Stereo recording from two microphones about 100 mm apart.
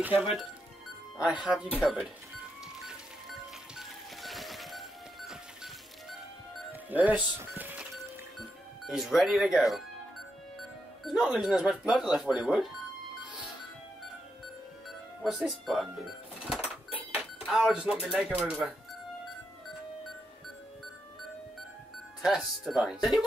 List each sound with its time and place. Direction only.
1.2 s speech: 10° right (ahead or behind)
1.8 s speech: centre (ahead or behind)
2.9 s music: 5° right (ahead or behind)
6.7 s music: 15° right (ahead or behind)
8.4 s speech: centre (ahead or behind)
11.3 s speech: 5° right (ahead or behind)
15.2 s speech: centre (ahead or behind)
16.4 s doorbell: 10° right (ahead or behind)
22.2 s speech: centre (ahead or behind)